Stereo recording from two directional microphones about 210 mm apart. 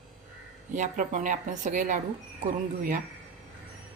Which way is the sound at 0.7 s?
35° right (ahead or behind).